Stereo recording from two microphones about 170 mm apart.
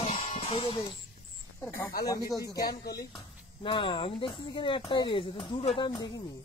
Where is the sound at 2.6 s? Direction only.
65° left (ahead or behind).